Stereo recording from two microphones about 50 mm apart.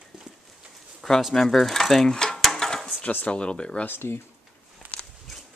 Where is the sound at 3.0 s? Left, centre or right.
Left.